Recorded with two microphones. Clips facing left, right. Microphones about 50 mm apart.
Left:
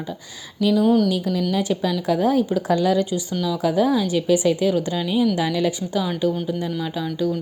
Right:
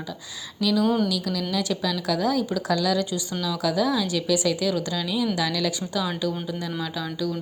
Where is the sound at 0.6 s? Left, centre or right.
Left.